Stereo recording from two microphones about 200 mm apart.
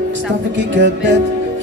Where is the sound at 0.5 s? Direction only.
60° right (ahead or behind).